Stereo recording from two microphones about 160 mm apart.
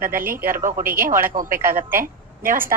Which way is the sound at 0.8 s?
15° right (ahead or behind).